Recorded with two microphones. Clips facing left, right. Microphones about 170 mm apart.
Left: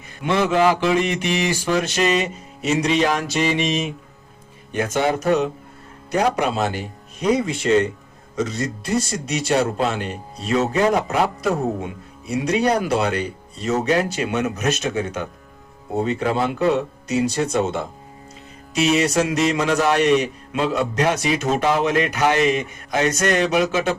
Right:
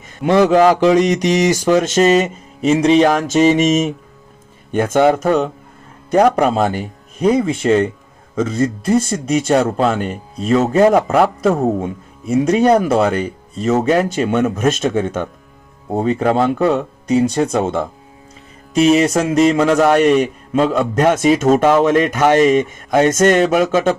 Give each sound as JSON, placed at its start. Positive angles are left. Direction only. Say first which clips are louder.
{"t": 0.2, "sound": "speech", "louder": "right 7 dB", "side_deg": -40}
{"t": 16.0, "sound": "speech", "louder": "right 5 dB", "side_deg": -45}